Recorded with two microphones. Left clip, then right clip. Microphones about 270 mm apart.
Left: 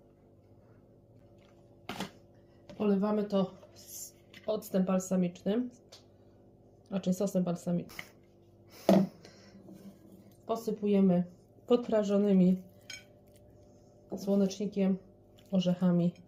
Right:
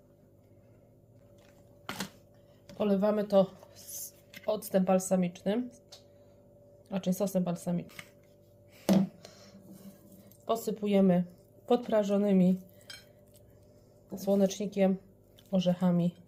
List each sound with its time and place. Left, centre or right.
2.7 s speech: right
6.8 s speech: centre
10.4 s speech: right
11.6 s speech: centre
14.2 s speech: right